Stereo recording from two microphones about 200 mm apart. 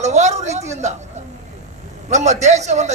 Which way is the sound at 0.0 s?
35° right (ahead or behind).